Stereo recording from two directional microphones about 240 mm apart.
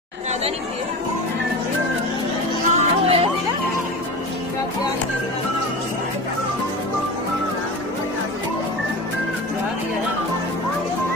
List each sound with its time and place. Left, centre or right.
2.7 s music: right